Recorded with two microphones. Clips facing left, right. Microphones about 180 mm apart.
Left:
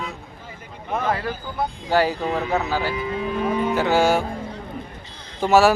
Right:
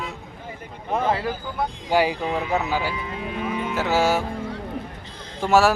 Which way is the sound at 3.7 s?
Centre (ahead or behind).